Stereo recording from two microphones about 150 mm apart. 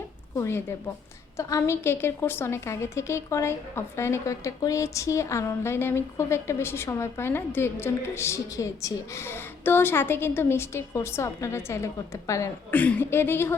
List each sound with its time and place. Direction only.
0.3 s a woman's voice: 20° left (ahead or behind)